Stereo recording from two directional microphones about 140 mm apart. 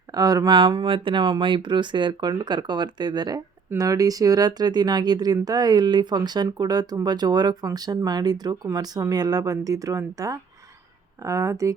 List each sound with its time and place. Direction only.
0.1 s speech: 25° right (ahead or behind)